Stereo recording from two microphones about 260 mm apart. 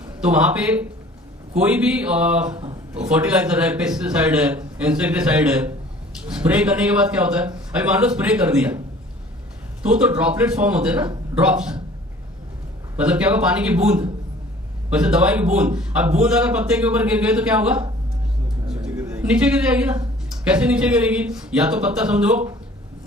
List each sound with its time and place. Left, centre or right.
0.0 s a man's voice: centre
9.9 s a man's voice: centre
12.9 s a man's voice: centre
14.9 s a man's voice: centre
18.7 s a sound: centre
20.0 s a man's voice: centre